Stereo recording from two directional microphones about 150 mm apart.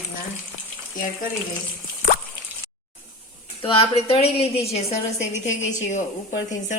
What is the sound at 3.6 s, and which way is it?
Speech, 40° left (ahead or behind).